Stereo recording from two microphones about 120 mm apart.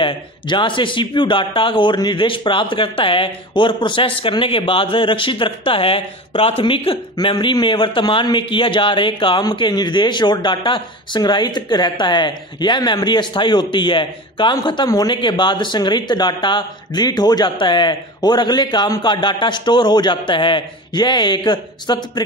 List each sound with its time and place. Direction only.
0.0 s a man's voice: 45° left (ahead or behind)